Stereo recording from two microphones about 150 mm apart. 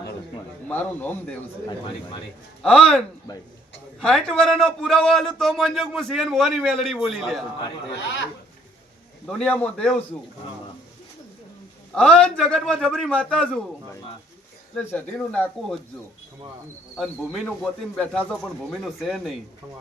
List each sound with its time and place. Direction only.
2.6 s a man's voice: 5° left (ahead or behind)
3.3 s a man's voice: 20° left (ahead or behind)
4.0 s a man's voice: 5° left (ahead or behind)
9.2 s a man's voice: 5° left (ahead or behind)
11.9 s a man's voice: 5° left (ahead or behind)
14.8 s speech: 10° left (ahead or behind)
17.0 s a man's voice: centre (ahead or behind)